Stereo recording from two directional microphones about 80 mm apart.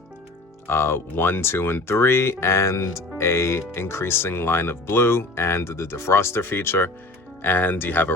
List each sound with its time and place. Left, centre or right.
0.7 s speech: left